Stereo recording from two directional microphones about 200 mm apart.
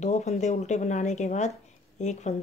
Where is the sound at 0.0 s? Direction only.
35° left (ahead or behind).